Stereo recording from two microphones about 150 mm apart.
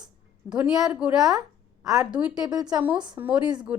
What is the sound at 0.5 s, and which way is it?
A woman's voice, 5° right (ahead or behind).